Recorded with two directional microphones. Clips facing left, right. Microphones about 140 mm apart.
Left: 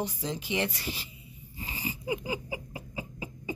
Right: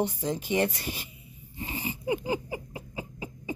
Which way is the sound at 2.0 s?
30° right (ahead or behind).